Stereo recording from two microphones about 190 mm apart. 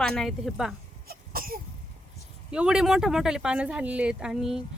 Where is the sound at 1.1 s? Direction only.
50° right (ahead or behind).